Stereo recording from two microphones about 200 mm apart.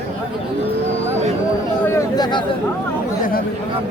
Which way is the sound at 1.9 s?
20° left (ahead or behind).